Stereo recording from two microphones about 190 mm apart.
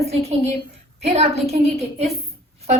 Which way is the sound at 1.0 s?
35° right (ahead or behind).